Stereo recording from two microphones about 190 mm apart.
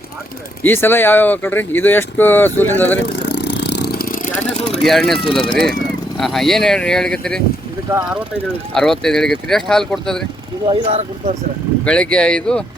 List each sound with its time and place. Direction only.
0.6 s speech: 10° left (ahead or behind)
3.2 s vehicle: 65° left (ahead or behind); by 4.4 s 50° left (ahead or behind)
4.8 s speech: centre (ahead or behind)
5.2 s speech: 25° left (ahead or behind)
6.1 s speech: centre (ahead or behind)
8.7 s speech: centre (ahead or behind)
10.7 s speech: 35° right (ahead or behind)
11.9 s speech: 5° left (ahead or behind)